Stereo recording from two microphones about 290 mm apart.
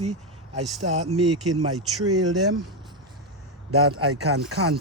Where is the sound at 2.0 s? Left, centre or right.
Right.